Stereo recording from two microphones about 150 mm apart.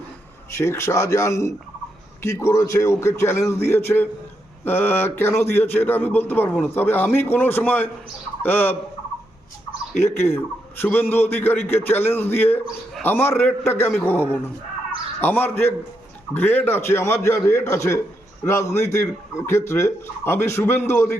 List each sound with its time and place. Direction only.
0.5 s speech: 15° left (ahead or behind)
10.2 s speech: 15° left (ahead or behind)